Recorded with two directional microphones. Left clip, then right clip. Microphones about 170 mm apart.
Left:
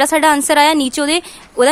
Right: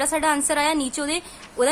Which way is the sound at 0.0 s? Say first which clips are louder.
Left 10 dB; 50° left (ahead or behind).